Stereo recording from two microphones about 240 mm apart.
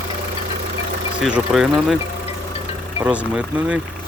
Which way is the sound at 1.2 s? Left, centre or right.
Centre.